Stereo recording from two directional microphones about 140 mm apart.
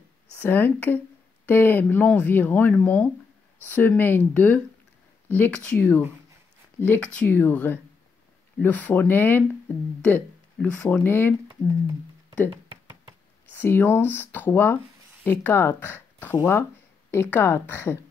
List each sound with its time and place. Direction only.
0.4 s speech: 15° left (ahead or behind)
13.5 s speech: 15° left (ahead or behind)